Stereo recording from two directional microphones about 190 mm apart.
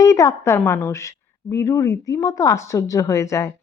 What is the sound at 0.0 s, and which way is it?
A woman's voice, 15° left (ahead or behind).